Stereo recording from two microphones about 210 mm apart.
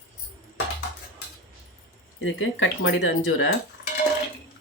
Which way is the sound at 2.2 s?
65° left (ahead or behind).